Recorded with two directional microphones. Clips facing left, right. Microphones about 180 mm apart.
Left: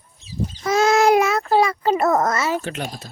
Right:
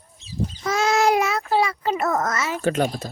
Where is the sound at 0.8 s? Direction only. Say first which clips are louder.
Left 4 dB; 50° left (ahead or behind); by 2.6 s 30° left (ahead or behind).